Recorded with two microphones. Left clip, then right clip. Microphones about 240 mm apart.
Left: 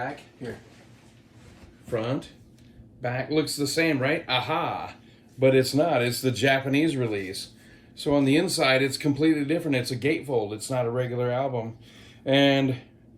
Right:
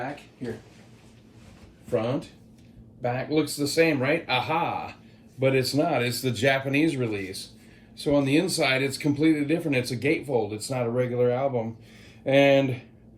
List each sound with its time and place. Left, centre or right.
3.0 s speech: centre